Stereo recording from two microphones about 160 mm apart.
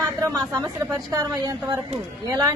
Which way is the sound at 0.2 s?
20° right (ahead or behind).